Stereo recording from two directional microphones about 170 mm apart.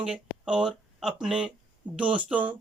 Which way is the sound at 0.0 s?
5° right (ahead or behind).